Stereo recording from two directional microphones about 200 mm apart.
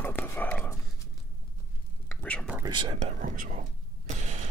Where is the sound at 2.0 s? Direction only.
5° left (ahead or behind).